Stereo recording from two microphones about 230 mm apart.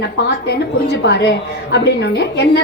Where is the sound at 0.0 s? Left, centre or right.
Left.